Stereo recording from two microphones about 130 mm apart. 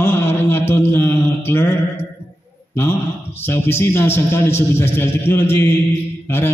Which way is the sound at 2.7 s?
15° left (ahead or behind).